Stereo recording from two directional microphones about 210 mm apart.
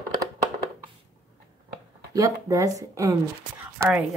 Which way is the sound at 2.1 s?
15° right (ahead or behind).